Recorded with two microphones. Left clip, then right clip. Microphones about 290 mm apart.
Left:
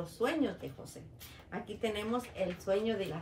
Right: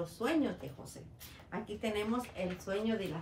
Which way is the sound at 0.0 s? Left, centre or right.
Centre.